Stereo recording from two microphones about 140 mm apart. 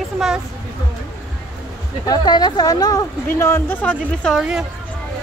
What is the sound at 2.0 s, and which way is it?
Speech, 30° left (ahead or behind).